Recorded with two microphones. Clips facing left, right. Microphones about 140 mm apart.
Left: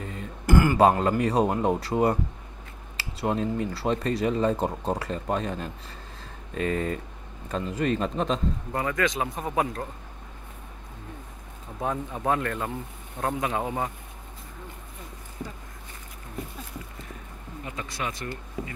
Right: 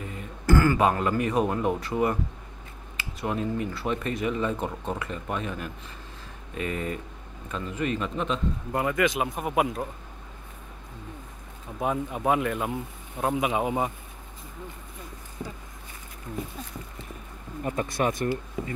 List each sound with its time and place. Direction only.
0.5 s a sound: 20° left (ahead or behind)
0.7 s speech: 35° left (ahead or behind)
8.7 s speech: 5° right (ahead or behind)
11.8 s speech: 10° right (ahead or behind)
17.6 s speech: 50° right (ahead or behind)